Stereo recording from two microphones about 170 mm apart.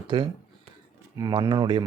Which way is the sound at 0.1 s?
30° right (ahead or behind).